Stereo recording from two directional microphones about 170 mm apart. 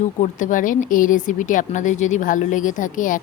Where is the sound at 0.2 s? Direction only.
50° left (ahead or behind).